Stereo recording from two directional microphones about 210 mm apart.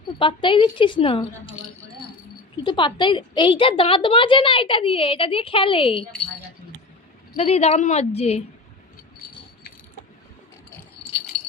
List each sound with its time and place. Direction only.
0.2 s a woman's voice: 25° left (ahead or behind)
2.6 s a woman's voice: 20° left (ahead or behind)
7.3 s a woman's voice: 30° left (ahead or behind)